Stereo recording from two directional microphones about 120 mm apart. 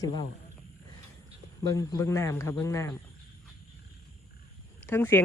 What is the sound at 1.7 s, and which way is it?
Speech, 25° left (ahead or behind).